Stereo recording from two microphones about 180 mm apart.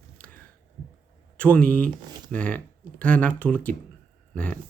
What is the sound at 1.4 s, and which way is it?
Speech, 5° left (ahead or behind).